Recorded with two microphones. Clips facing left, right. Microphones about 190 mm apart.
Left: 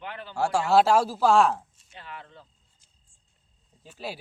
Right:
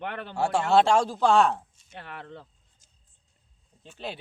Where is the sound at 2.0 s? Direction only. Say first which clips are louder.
Right 3 dB; 60° right (ahead or behind).